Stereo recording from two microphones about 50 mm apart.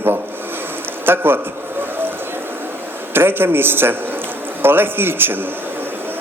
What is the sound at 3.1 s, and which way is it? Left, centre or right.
A man's voice, right.